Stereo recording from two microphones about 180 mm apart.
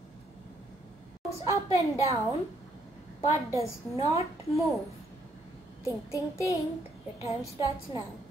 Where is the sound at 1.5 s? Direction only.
15° right (ahead or behind).